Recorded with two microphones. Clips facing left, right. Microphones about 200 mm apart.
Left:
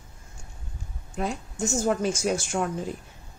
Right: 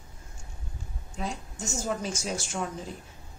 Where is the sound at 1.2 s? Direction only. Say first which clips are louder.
Left 6 dB; 55° left (ahead or behind).